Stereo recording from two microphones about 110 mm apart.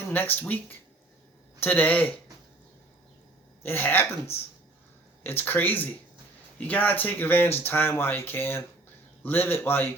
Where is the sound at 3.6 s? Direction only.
15° left (ahead or behind).